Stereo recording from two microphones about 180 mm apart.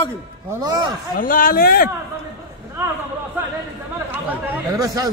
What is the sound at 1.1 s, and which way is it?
Speech, 50° left (ahead or behind).